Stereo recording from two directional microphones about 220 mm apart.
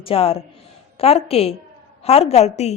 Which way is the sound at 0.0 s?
25° left (ahead or behind).